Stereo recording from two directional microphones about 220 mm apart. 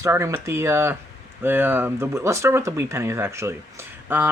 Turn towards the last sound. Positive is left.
turn(degrees=-10)  # may be behind; listen again after turning